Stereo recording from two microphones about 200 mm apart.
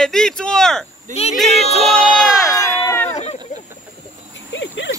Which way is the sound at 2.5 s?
15° left (ahead or behind).